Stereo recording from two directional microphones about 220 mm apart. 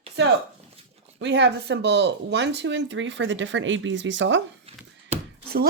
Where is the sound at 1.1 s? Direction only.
55° right (ahead or behind).